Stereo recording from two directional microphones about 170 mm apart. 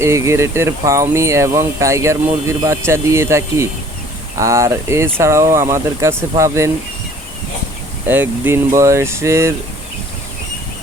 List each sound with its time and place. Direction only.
0.0 s speech: 15° right (ahead or behind)
8.0 s speech: 10° right (ahead or behind)